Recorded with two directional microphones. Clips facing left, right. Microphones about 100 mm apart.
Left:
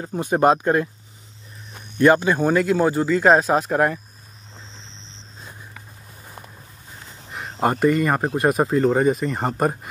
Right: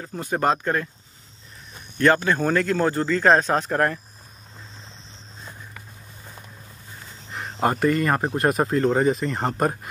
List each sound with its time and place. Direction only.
0.0 s speech: 20° left (ahead or behind)
7.2 s speech: 10° left (ahead or behind)